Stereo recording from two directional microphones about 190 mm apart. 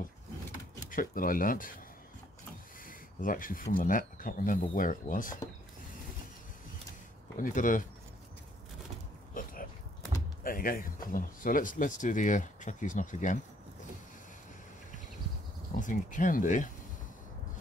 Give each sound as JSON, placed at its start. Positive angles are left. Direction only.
{"t": 0.8, "sound": "speech", "side_deg": 45}
{"t": 2.8, "sound": "a sound", "side_deg": 45}
{"t": 3.7, "sound": "speech", "side_deg": 45}
{"t": 7.3, "sound": "speech", "side_deg": 45}
{"t": 9.3, "sound": "a sound", "side_deg": 45}
{"t": 10.4, "sound": "speech", "side_deg": 50}
{"t": 15.7, "sound": "speech", "side_deg": 45}